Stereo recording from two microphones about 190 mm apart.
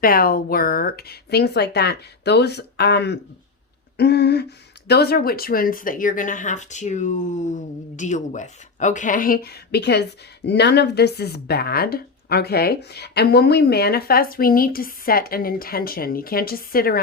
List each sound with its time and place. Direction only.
0.0 s speech: 50° left (ahead or behind)